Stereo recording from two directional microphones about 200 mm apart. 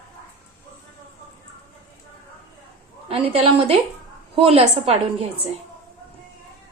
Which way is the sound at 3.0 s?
30° right (ahead or behind).